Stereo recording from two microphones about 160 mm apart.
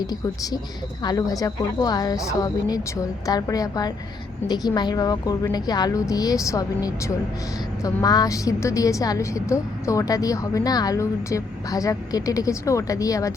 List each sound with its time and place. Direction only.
0.0 s a woman's voice: 25° left (ahead or behind)